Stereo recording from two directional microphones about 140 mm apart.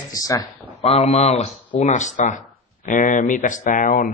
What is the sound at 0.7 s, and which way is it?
Speech, 45° left (ahead or behind).